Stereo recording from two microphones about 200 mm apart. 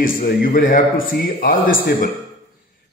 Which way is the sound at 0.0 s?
45° left (ahead or behind).